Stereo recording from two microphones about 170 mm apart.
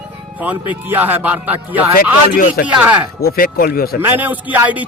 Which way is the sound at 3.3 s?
65° left (ahead or behind).